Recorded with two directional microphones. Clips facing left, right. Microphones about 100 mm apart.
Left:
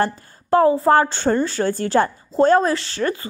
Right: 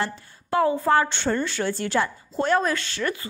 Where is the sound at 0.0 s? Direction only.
40° left (ahead or behind).